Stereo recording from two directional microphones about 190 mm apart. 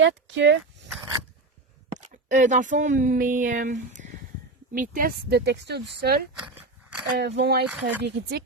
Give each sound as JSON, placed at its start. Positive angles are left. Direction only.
{"t": 0.0, "sound": "speech", "side_deg": -70}
{"t": 1.9, "sound": "speech", "side_deg": -40}
{"t": 6.3, "sound": "a sound", "side_deg": -5}
{"t": 7.2, "sound": "speech", "side_deg": -60}
{"t": 7.7, "sound": "speech", "side_deg": -10}